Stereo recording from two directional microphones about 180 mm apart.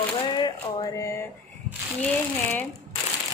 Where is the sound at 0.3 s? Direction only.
20° left (ahead or behind).